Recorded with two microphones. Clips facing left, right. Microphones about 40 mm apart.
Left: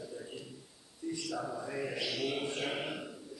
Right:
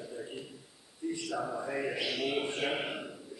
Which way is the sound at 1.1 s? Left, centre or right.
Centre.